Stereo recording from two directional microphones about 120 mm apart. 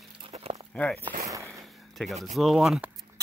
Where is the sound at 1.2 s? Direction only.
25° right (ahead or behind).